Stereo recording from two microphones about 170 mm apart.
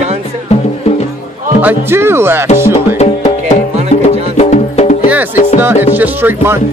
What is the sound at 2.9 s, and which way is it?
Music, 45° left (ahead or behind).